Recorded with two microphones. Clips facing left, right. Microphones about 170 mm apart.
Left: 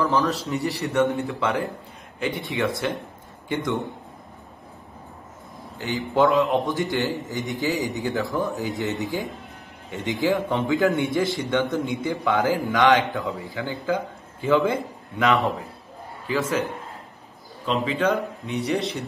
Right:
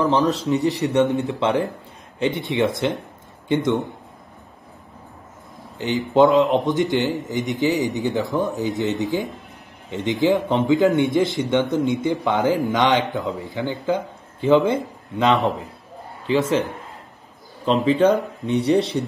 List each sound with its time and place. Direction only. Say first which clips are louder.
0.0 s a man's voice: right 4 dB; 20° right (ahead or behind)
2.5 s a man's voice: right 3 dB; 20° right (ahead or behind)
5.8 s a man's voice: right 5 dB; 20° right (ahead or behind)
16.3 s a man's voice: right 5 dB; 25° right (ahead or behind)
17.6 s speech: right 6 dB; 35° right (ahead or behind)